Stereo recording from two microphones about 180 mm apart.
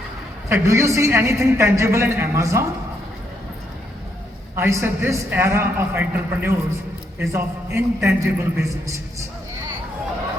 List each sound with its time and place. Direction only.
0.4 s a woman's voice: 15° right (ahead or behind)
4.5 s a woman's voice: 15° right (ahead or behind)